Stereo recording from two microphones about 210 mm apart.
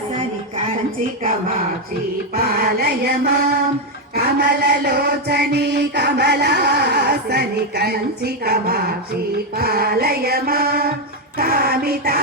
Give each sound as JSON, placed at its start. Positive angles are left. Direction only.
{"t": 2.3, "sound": "chant", "side_deg": -45}